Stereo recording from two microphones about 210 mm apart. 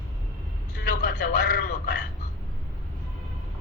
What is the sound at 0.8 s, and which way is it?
A woman's voice, 50° left (ahead or behind).